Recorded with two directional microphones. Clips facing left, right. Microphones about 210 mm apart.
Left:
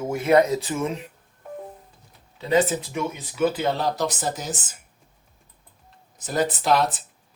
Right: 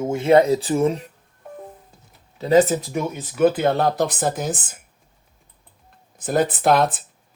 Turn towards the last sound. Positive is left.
turn(degrees=-55)  # may be behind; listen again after turning